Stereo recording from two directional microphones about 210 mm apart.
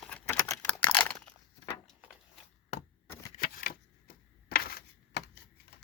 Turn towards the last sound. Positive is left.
turn(degrees=45)  # may be behind; listen again after turning